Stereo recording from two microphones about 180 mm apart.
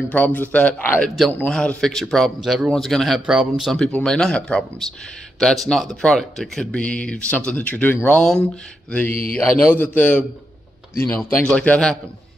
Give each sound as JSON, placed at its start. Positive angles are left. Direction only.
{"t": 0.1, "sound": "a man's voice", "side_deg": 10}
{"t": 9.1, "sound": "speech", "side_deg": 55}
{"t": 9.6, "sound": "a man's voice", "side_deg": 10}